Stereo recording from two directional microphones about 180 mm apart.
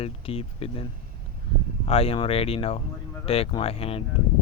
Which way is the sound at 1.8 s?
35° left (ahead or behind).